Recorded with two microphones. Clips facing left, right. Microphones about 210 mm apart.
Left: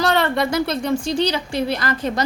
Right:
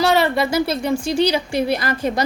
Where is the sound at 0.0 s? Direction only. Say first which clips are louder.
Right 2 dB; 5° right (ahead or behind).